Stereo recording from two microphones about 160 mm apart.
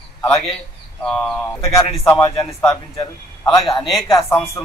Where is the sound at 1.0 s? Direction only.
5° left (ahead or behind).